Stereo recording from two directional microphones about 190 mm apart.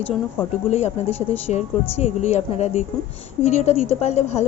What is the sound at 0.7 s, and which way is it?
A woman's voice, 35° left (ahead or behind).